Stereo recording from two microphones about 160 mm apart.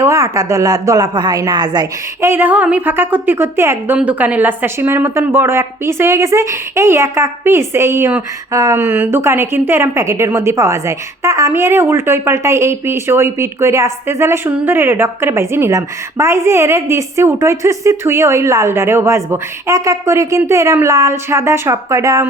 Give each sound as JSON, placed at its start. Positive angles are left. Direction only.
{"t": 0.0, "sound": "a woman's voice", "side_deg": -20}